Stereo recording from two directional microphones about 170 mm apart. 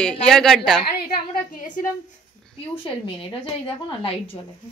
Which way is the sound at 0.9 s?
55° left (ahead or behind).